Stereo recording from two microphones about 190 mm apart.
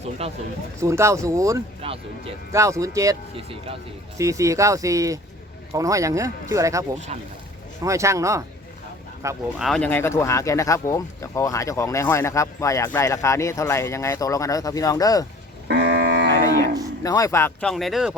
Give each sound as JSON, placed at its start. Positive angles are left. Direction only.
{"t": 0.2, "sound": "speech", "side_deg": -35}
{"t": 0.8, "sound": "speech", "side_deg": -15}
{"t": 1.8, "sound": "speech", "side_deg": -30}
{"t": 2.5, "sound": "speech", "side_deg": -15}
{"t": 3.3, "sound": "speech", "side_deg": -30}
{"t": 4.2, "sound": "speech", "side_deg": -15}
{"t": 7.1, "sound": "speech", "side_deg": -35}
{"t": 7.9, "sound": "speech", "side_deg": -15}
{"t": 9.6, "sound": "speech", "side_deg": 0}
{"t": 15.6, "sound": "cattle", "side_deg": -60}
{"t": 17.0, "sound": "speech", "side_deg": 15}